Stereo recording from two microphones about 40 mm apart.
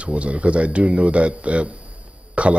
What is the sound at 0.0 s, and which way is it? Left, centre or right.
A woman's voice, right.